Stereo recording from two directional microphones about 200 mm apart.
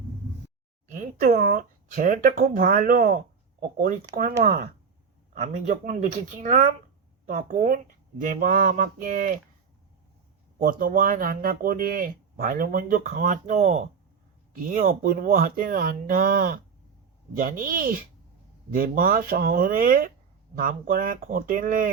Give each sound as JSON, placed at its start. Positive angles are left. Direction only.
{"t": 0.9, "sound": "speech", "side_deg": -45}
{"t": 5.4, "sound": "speech", "side_deg": -40}
{"t": 10.6, "sound": "speech", "side_deg": -45}